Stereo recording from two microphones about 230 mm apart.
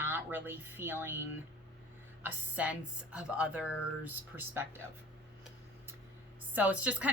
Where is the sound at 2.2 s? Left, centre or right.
Centre.